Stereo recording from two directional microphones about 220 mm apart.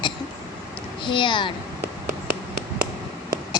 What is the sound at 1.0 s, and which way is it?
Speech, 20° left (ahead or behind).